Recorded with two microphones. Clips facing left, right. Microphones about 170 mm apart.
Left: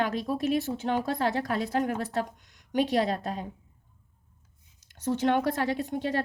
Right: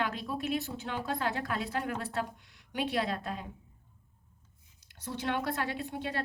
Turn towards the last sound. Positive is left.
turn(degrees=40)  # may be behind; listen again after turning